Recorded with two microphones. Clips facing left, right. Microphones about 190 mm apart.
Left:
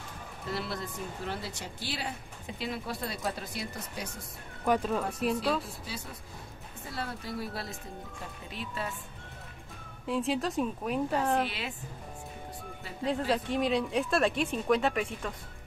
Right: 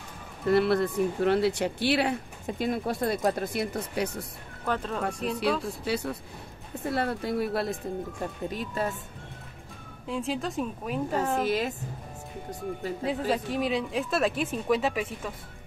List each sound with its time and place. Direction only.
0.5 s speech: 60° right (ahead or behind)
2.4 s speech: 50° right (ahead or behind)
4.6 s speech: 10° left (ahead or behind)
6.8 s speech: 60° right (ahead or behind)
8.2 s speech: 45° right (ahead or behind)
10.0 s speech: centre (ahead or behind)
11.4 s speech: 45° right (ahead or behind)
13.0 s speech: 5° right (ahead or behind)